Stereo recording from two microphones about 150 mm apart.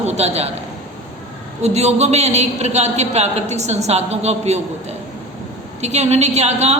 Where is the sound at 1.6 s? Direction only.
45° right (ahead or behind).